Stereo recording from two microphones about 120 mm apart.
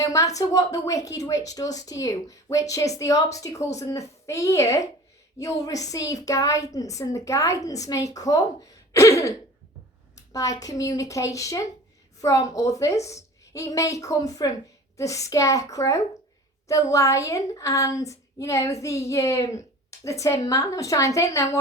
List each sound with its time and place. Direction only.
0.0 s a woman's voice: 30° left (ahead or behind)
8.9 s throat clearing: 25° left (ahead or behind)
10.6 s a woman's voice: 30° left (ahead or behind)